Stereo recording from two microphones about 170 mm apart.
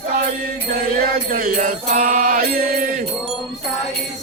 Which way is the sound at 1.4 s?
50° right (ahead or behind).